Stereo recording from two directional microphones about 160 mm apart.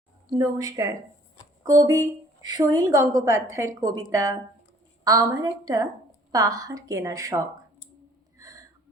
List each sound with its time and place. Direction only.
0.3 s a woman's voice: 20° right (ahead or behind)
8.4 s gasp: 20° right (ahead or behind)